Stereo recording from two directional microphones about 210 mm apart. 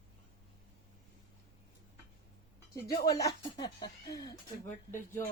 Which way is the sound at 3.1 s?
15° left (ahead or behind).